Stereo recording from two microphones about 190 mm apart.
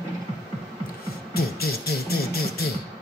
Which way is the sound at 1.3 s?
55° left (ahead or behind).